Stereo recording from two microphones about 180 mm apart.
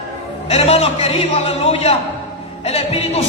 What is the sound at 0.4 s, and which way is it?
Music, 35° left (ahead or behind).